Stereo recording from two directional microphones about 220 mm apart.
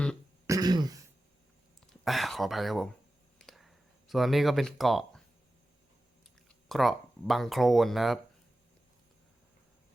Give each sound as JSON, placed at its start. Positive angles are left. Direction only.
{"t": 0.4, "sound": "throat clearing", "side_deg": -15}
{"t": 2.0, "sound": "speech", "side_deg": 0}
{"t": 3.3, "sound": "a sound", "side_deg": 0}
{"t": 4.1, "sound": "speech", "side_deg": 0}
{"t": 6.7, "sound": "speech", "side_deg": 0}